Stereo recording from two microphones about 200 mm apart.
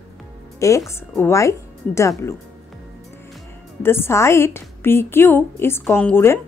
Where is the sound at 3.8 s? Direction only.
10° left (ahead or behind).